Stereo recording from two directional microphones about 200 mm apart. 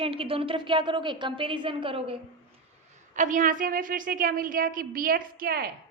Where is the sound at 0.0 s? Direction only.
25° right (ahead or behind).